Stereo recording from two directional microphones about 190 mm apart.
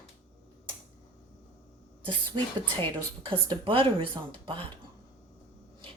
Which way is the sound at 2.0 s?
25° right (ahead or behind).